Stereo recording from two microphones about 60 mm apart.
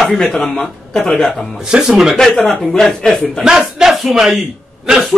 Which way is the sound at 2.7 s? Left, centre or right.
Centre.